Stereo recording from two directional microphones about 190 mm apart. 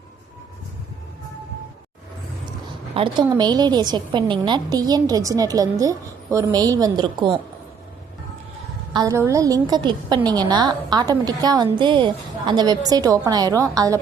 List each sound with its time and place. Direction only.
2.9 s a woman's voice: 25° right (ahead or behind)
8.9 s a woman's voice: 20° right (ahead or behind)